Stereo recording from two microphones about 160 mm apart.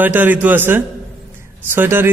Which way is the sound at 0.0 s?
10° right (ahead or behind).